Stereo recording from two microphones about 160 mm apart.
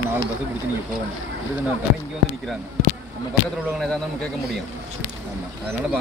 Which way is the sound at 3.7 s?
5° left (ahead or behind).